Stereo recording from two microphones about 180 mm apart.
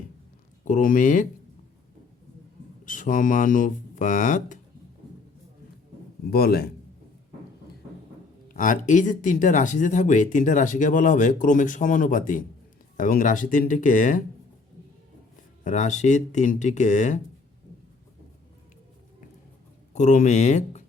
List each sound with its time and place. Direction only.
0.6 s speech: 50° left (ahead or behind)
2.8 s speech: 45° left (ahead or behind)
6.3 s a man's voice: 60° left (ahead or behind)
8.4 s speech: 45° left (ahead or behind)
15.6 s speech: 40° left (ahead or behind)
19.9 s speech: 40° left (ahead or behind)